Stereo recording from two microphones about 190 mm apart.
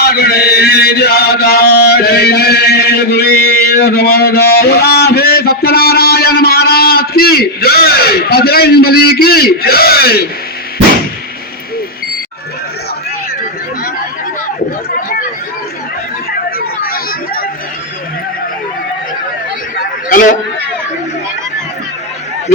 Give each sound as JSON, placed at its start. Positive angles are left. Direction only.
{"t": 0.0, "sound": "chant", "side_deg": 55}
{"t": 16.6, "sound": "chatter", "side_deg": 50}
{"t": 19.8, "sound": "a sound", "side_deg": 45}